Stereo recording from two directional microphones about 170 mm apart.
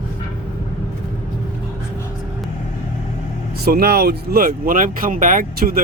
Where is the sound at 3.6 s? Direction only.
65° right (ahead or behind).